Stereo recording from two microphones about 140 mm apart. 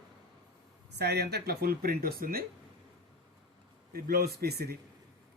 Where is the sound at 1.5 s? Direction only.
90° right.